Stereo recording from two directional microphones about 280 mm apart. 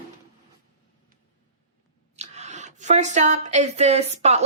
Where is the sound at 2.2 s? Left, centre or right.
Right.